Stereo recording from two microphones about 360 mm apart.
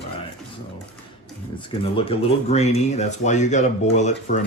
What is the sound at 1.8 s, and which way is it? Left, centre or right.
Speech, centre.